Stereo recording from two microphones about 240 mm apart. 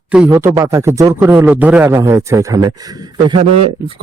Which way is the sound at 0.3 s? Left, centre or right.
Centre.